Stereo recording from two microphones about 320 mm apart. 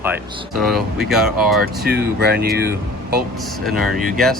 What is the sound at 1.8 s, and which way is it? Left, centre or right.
Speech, right.